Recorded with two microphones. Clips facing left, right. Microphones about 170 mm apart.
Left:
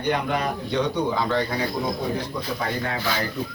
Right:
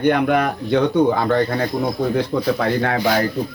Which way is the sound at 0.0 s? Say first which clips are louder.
Right 8 dB; 60° right (ahead or behind).